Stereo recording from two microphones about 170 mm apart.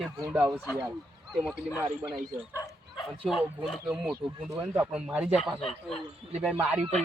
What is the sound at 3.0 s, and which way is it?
Speech, centre (ahead or behind).